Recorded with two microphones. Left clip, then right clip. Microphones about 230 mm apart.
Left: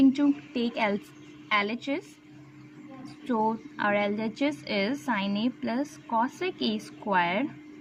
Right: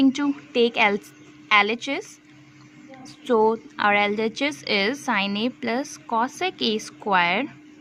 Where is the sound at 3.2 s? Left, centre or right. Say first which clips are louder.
Right 8 dB; right.